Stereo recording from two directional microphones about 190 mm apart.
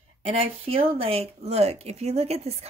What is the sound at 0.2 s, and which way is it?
Speech, 30° right (ahead or behind).